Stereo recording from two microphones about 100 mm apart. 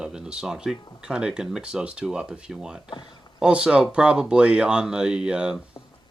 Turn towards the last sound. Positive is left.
turn(degrees=-10)  # may be behind; listen again after turning